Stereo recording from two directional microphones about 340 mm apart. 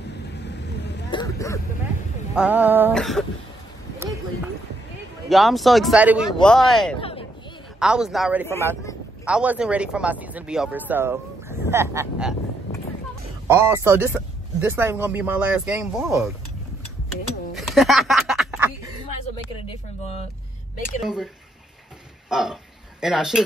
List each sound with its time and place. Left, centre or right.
1.1 s dog: centre
2.3 s speech: centre
5.3 s speech: centre
7.0 s a sound: centre
7.8 s speech: centre
13.5 s speech: centre
17.6 s a sound: centre
19.6 s speech: centre
21.0 s speech: centre
22.3 s speech: centre